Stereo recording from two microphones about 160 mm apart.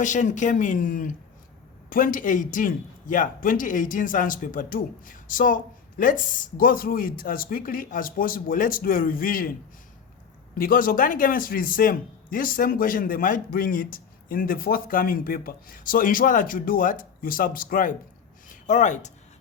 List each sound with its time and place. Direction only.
0.0 s a man's voice: 50° left (ahead or behind)
10.5 s a man's voice: 60° left (ahead or behind)